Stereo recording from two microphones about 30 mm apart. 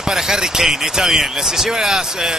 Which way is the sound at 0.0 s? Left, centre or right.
Centre.